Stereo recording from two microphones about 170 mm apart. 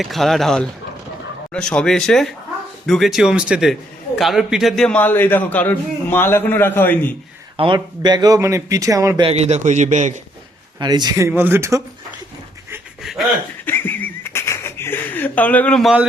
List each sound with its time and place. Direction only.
0.0 s a man's voice: centre (ahead or behind)
7.5 s speech: 30° right (ahead or behind)
9.2 s a man's voice: 40° right (ahead or behind)
10.8 s speech: 25° right (ahead or behind)
11.3 s speech: 10° right (ahead or behind)
13.0 s a sound: centre (ahead or behind)
13.7 s a sound: 10° left (ahead or behind)